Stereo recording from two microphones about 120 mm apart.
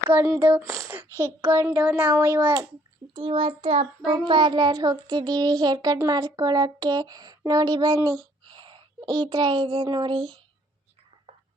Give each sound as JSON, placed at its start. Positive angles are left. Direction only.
{"t": 0.1, "sound": "speech", "side_deg": -20}
{"t": 1.8, "sound": "a child's voice", "side_deg": -10}
{"t": 3.2, "sound": "child singing", "side_deg": -50}
{"t": 4.3, "sound": "a child's voice", "side_deg": -45}
{"t": 8.4, "sound": "a child's voice", "side_deg": -40}